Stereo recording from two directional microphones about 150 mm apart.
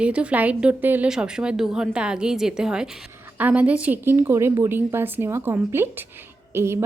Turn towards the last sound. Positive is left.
turn(degrees=-15)  # may be behind; listen again after turning